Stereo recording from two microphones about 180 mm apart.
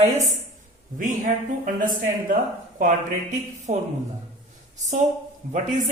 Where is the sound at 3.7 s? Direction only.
40° right (ahead or behind).